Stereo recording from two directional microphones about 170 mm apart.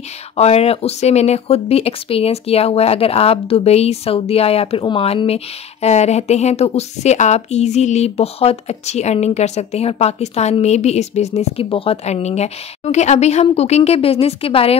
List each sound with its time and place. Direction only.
0.4 s speech: 40° left (ahead or behind)